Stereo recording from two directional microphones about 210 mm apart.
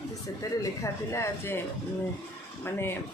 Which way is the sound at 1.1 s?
10° left (ahead or behind).